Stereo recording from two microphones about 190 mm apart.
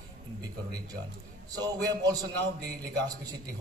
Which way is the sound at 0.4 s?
20° right (ahead or behind).